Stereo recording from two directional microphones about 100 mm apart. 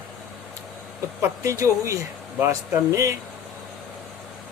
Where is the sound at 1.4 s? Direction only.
30° right (ahead or behind).